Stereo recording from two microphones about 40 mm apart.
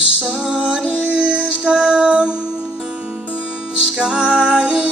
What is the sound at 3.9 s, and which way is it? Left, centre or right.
Music, right.